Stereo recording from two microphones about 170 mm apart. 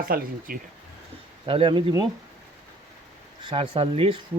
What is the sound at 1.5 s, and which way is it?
Speech, 30° right (ahead or behind).